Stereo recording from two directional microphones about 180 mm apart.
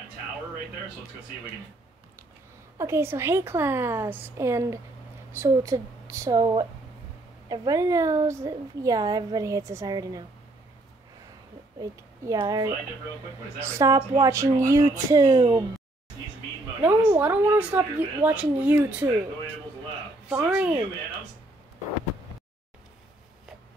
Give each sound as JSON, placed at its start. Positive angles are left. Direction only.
{"t": 2.8, "sound": "a woman's voice", "side_deg": -15}
{"t": 11.8, "sound": "a woman's voice", "side_deg": -20}
{"t": 16.8, "sound": "a woman's voice", "side_deg": -10}
{"t": 20.2, "sound": "a woman's voice", "side_deg": -10}